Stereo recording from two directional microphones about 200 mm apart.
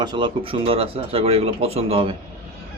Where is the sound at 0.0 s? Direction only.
20° right (ahead or behind).